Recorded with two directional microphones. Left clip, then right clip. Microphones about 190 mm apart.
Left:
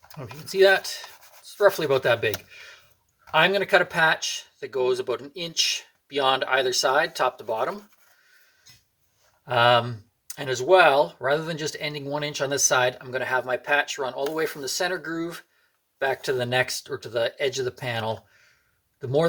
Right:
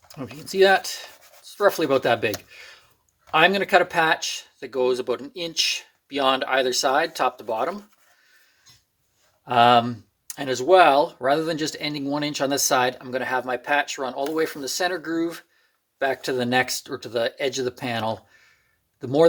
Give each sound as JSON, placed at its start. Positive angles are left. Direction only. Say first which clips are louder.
{"t": 0.1, "sound": "speech", "louder": "right 1 dB", "side_deg": -30}
{"t": 2.5, "sound": "a sound", "louder": "right 1 dB", "side_deg": -35}
{"t": 3.3, "sound": "speech", "louder": "right 2 dB", "side_deg": -35}
{"t": 9.4, "sound": "speech", "louder": "right 3 dB", "side_deg": -30}